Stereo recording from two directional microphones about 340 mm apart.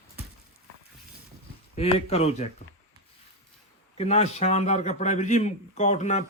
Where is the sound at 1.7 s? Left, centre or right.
Centre.